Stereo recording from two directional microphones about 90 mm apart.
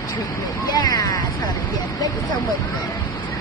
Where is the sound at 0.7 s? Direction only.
50° left (ahead or behind).